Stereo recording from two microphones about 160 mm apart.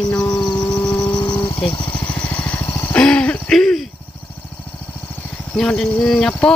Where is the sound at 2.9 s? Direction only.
5° left (ahead or behind).